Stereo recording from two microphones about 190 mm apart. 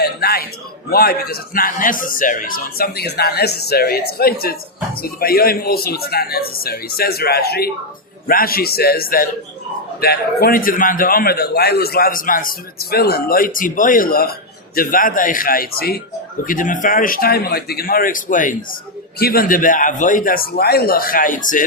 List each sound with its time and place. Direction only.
0.0 s a man's voice: 55° left (ahead or behind)